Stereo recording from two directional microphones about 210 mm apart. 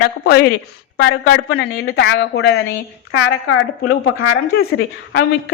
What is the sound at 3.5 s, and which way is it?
Speech, 90° left.